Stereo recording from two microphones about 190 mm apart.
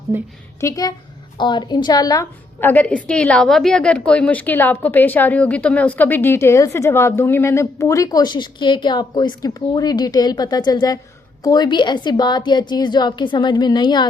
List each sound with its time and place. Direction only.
0.1 s a woman's voice: 10° right (ahead or behind)
0.6 s a woman's voice: 20° left (ahead or behind)